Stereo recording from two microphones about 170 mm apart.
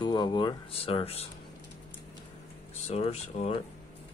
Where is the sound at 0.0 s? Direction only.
25° left (ahead or behind).